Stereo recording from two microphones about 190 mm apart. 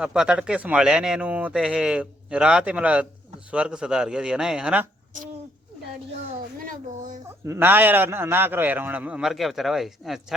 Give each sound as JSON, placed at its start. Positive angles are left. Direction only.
{"t": 0.0, "sound": "speech", "side_deg": -5}
{"t": 6.6, "sound": "a child's voice", "side_deg": -45}
{"t": 7.4, "sound": "a man's voice", "side_deg": -15}